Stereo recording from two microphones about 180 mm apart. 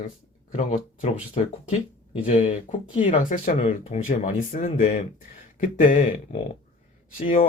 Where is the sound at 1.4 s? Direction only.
35° left (ahead or behind).